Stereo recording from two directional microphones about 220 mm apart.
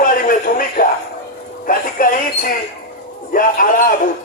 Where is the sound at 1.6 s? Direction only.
40° left (ahead or behind).